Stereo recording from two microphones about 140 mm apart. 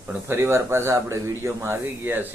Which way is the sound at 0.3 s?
20° right (ahead or behind).